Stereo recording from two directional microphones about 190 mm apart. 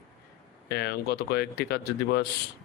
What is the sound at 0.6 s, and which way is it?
Speech, 55° left (ahead or behind).